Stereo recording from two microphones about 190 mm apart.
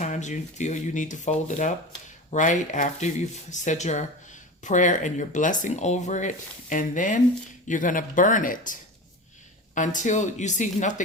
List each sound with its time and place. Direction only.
0.0 s speech: 40° left (ahead or behind)